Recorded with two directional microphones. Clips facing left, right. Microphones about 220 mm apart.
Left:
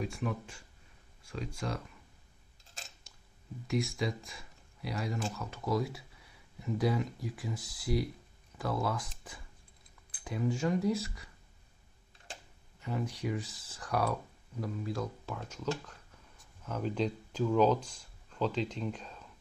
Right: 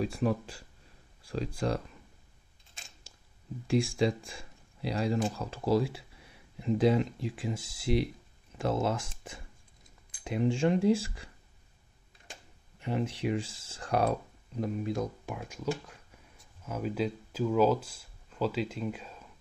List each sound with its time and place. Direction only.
0.0 s speech: 35° right (ahead or behind)
3.6 s speech: 30° right (ahead or behind)
10.2 s speech: 25° right (ahead or behind)
12.8 s speech: 25° right (ahead or behind); by 19.2 s 5° right (ahead or behind)